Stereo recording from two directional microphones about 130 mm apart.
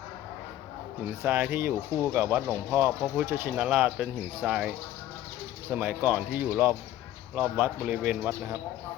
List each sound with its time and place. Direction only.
1.2 s speech: 15° right (ahead or behind)
5.7 s speech: 15° right (ahead or behind)